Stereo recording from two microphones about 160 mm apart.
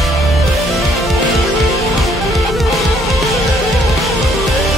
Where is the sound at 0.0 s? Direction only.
Centre (ahead or behind).